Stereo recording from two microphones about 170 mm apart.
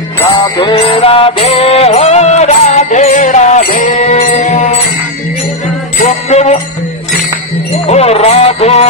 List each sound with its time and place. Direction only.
0.3 s music: 25° left (ahead or behind)
5.9 s jingle bell: 40° left (ahead or behind)
7.8 s music: 40° left (ahead or behind)